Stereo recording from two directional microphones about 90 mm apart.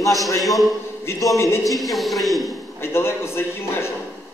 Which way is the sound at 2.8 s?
30° left (ahead or behind).